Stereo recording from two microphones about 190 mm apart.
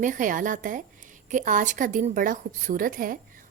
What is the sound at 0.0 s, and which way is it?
A woman's voice, 45° right (ahead or behind).